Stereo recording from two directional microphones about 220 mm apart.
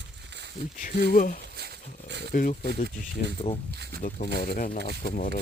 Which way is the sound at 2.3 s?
40° left (ahead or behind).